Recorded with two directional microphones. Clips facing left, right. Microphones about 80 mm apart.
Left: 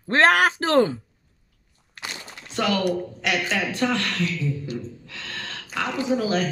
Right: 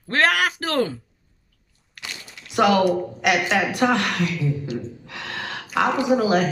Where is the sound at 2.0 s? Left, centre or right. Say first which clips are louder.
Left 2 dB; left.